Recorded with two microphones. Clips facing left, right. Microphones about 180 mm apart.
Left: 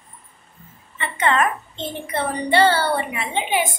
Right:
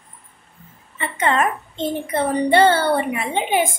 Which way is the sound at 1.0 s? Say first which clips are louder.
Right 1 dB; 40° right (ahead or behind).